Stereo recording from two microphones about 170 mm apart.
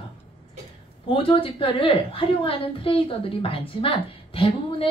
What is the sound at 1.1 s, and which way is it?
A woman's voice, 30° left (ahead or behind).